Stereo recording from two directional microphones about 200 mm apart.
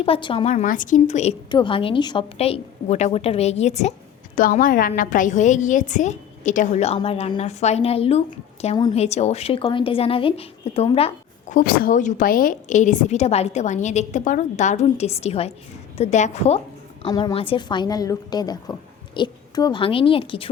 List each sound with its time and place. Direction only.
0.0 s a woman's voice: 25° left (ahead or behind)
17.0 s a woman's voice: 20° left (ahead or behind)